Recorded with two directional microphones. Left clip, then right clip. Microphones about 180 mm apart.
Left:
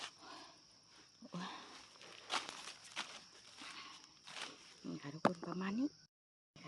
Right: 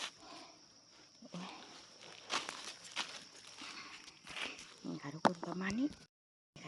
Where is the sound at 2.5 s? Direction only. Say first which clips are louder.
Right 4 dB; 15° right (ahead or behind).